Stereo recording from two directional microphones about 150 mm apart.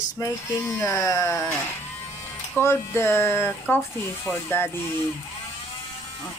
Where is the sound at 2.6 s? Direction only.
20° left (ahead or behind).